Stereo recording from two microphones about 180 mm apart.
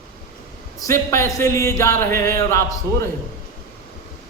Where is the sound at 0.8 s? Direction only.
15° left (ahead or behind).